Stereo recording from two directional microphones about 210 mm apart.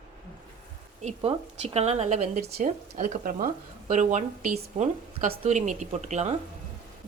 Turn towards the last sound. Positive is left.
turn(degrees=-30)  # may be behind; listen again after turning